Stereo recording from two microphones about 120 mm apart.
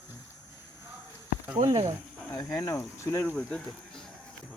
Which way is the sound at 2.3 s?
30° left (ahead or behind).